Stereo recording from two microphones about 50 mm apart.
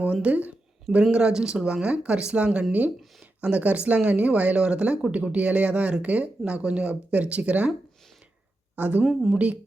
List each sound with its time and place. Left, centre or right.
0.0 s speech: right
1.1 s speech: centre
8.7 s speech: right
9.0 s speech: centre